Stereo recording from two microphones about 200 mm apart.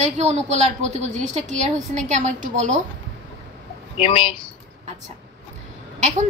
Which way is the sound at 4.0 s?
25° left (ahead or behind).